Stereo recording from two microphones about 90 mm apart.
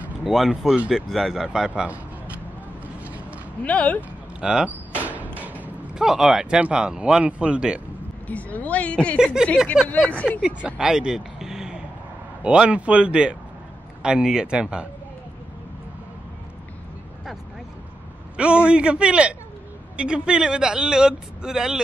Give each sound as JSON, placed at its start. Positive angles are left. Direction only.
{"t": 0.2, "sound": "speech", "side_deg": 0}
{"t": 3.6, "sound": "a woman's voice", "side_deg": 15}
{"t": 4.4, "sound": "door", "side_deg": -10}
{"t": 5.9, "sound": "speech", "side_deg": -5}
{"t": 8.3, "sound": "a woman's voice", "side_deg": 15}
{"t": 9.2, "sound": "speech", "side_deg": -5}
{"t": 18.3, "sound": "a man's voice", "side_deg": -10}